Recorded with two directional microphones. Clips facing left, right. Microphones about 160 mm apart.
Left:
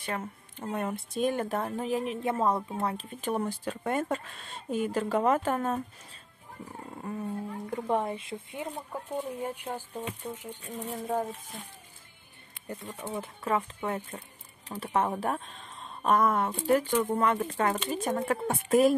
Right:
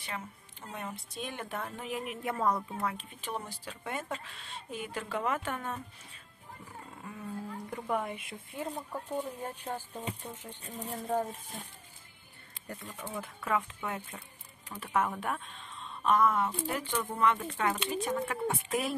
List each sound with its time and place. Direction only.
0.0 s speech: 50° left (ahead or behind)
7.0 s speech: 40° left (ahead or behind)
7.2 s speech: 25° left (ahead or behind)
8.5 s speech: 10° left (ahead or behind)
12.6 s speech: 20° left (ahead or behind); by 18.9 s 45° left (ahead or behind)